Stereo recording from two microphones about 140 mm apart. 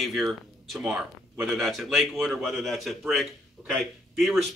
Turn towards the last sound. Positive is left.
turn(degrees=0)  # may be behind; listen again after turning